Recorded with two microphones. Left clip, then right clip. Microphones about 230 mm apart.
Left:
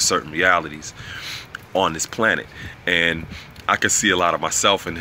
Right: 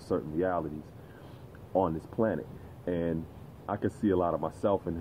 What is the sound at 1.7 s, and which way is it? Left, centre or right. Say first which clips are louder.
Speech: left 9 dB; left.